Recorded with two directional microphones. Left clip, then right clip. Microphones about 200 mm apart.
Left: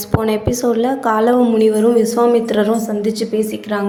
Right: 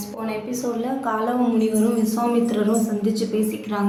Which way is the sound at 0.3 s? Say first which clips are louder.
Left 8 dB; 40° left (ahead or behind).